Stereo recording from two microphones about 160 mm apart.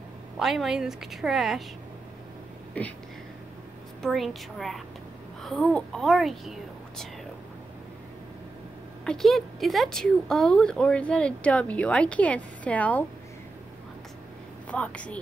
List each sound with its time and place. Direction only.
0.4 s a woman's voice: centre (ahead or behind)
2.8 s a woman's voice: 10° left (ahead or behind)
4.0 s a woman's voice: centre (ahead or behind)
9.0 s a woman's voice: centre (ahead or behind)
14.7 s a woman's voice: 10° left (ahead or behind)